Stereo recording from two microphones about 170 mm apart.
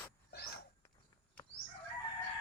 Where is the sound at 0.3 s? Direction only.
65° left (ahead or behind).